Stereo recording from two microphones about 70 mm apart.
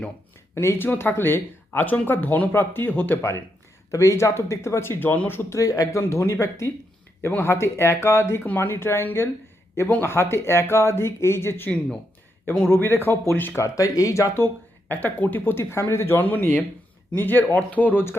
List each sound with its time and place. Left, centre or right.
0.5 s speech: left
3.2 s speech: left
5.5 s speech: left
12.7 s speech: left
13.6 s speech: left
14.3 s speech: left
15.7 s speech: left